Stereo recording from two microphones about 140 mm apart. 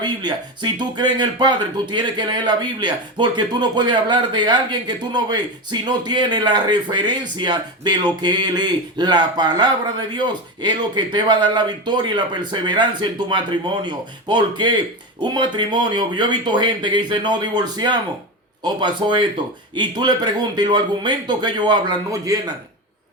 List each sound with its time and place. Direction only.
0.0 s speech: 30° right (ahead or behind)